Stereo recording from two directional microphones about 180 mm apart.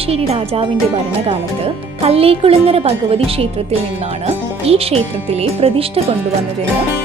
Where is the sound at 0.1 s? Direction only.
35° right (ahead or behind).